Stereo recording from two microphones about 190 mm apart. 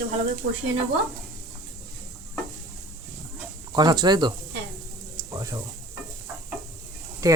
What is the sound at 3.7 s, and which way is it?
Speech, 20° right (ahead or behind).